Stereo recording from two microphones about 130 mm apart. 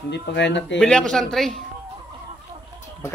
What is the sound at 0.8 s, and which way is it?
Speech, 5° left (ahead or behind).